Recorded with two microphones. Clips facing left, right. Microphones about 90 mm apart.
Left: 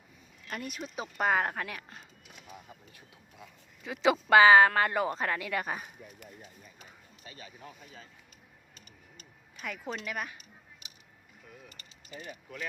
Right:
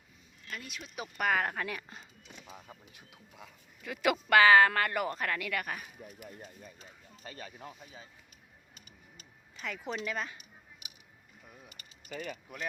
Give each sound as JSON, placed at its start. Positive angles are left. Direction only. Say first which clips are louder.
{"t": 0.4, "sound": "speech", "louder": "left 5 dB", "side_deg": 45}
{"t": 0.8, "sound": "speech", "louder": "left 2 dB", "side_deg": 30}
{"t": 1.3, "sound": "speech", "louder": "left 1 dB", "side_deg": 10}
{"t": 2.8, "sound": "a sound", "louder": "even", "side_deg": -20}
{"t": 4.0, "sound": "speech", "louder": "left 3 dB", "side_deg": 20}
{"t": 7.3, "sound": "a sound", "louder": "right 3 dB", "side_deg": -45}
{"t": 9.6, "sound": "speech", "louder": "even", "side_deg": 10}
{"t": 12.1, "sound": "speech", "louder": "right 4 dB", "side_deg": -75}